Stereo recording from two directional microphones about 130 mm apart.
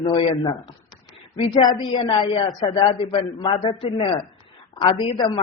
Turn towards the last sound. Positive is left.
turn(degrees=35)  # may be behind; listen again after turning